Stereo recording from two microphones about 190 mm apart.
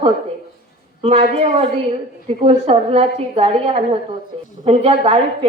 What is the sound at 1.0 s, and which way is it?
A woman's voice, 30° right (ahead or behind).